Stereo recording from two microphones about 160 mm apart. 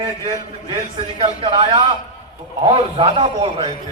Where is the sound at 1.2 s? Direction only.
35° right (ahead or behind).